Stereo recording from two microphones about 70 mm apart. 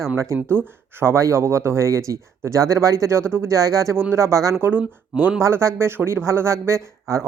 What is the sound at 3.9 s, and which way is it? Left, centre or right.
Speech, right.